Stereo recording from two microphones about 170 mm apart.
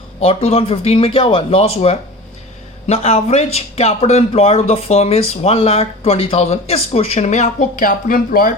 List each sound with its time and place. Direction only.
0.2 s speech: 35° left (ahead or behind); by 8.5 s 55° left (ahead or behind)